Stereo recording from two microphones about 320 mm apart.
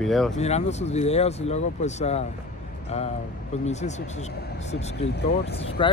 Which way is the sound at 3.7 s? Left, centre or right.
Left.